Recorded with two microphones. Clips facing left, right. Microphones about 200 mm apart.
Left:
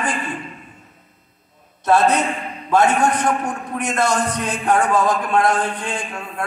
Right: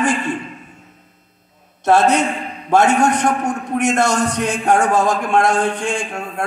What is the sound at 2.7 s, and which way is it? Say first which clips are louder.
A man's voice: right 2 dB; 75° right (ahead or behind).